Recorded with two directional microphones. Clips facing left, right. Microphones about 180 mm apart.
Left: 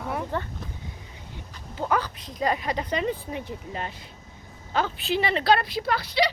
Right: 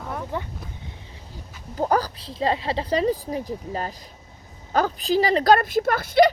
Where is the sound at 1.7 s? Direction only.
40° right (ahead or behind).